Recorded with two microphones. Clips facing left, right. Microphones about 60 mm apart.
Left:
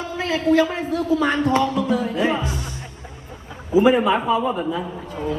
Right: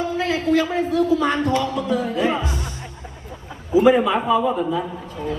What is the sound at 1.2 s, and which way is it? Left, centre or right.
Music, left.